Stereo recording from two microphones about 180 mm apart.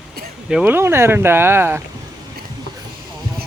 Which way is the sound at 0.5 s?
10° right (ahead or behind).